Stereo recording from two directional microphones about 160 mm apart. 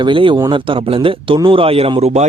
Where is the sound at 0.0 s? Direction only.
30° right (ahead or behind).